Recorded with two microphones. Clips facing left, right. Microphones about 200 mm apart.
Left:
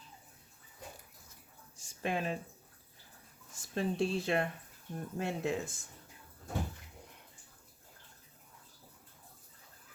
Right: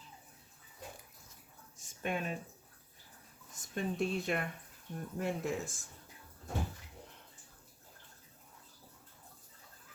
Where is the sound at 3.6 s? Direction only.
30° left (ahead or behind).